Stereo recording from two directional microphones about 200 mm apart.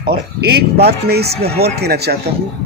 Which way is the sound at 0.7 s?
55° right (ahead or behind).